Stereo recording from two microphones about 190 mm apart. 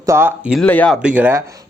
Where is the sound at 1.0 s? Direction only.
5° right (ahead or behind).